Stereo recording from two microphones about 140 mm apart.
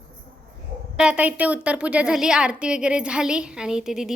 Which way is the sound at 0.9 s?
10° right (ahead or behind).